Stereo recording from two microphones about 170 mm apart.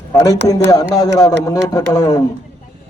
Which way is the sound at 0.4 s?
20° left (ahead or behind).